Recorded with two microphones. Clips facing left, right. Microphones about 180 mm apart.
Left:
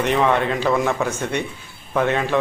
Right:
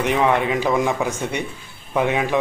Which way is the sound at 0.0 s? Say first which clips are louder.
Even; 15° right (ahead or behind).